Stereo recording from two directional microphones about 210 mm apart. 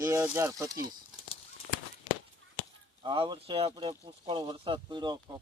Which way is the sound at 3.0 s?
25° right (ahead or behind).